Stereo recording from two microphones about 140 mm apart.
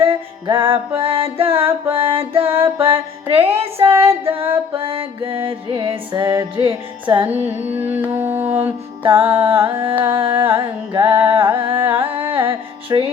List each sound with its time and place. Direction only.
0.0 s music: 40° right (ahead or behind)
7.8 s music: 15° right (ahead or behind)
9.0 s music: 40° right (ahead or behind)